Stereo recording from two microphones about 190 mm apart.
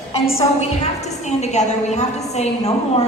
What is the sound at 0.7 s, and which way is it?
A woman's voice, 35° left (ahead or behind).